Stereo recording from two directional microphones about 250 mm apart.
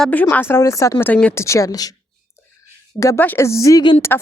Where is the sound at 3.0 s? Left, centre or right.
Centre.